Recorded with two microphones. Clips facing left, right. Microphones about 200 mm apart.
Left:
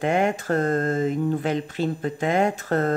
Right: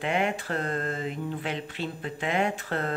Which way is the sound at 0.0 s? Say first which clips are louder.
Left 6 dB; 45° left (ahead or behind).